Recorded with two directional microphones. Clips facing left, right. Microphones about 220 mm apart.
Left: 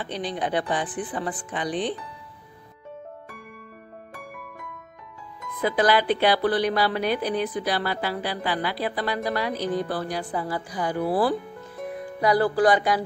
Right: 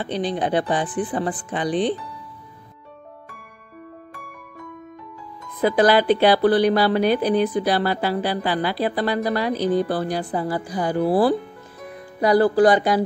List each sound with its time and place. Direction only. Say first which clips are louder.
0.0 s speech: right 5 dB; 30° right (ahead or behind)
5.6 s speech: right 5 dB; 35° right (ahead or behind)